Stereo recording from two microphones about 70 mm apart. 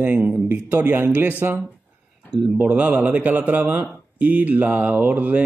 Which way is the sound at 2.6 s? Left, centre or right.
Right.